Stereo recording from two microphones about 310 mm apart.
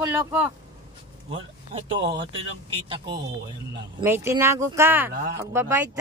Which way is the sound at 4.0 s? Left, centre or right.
Centre.